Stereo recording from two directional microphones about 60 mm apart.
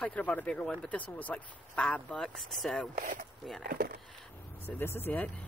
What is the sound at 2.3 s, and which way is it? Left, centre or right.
Speech, centre.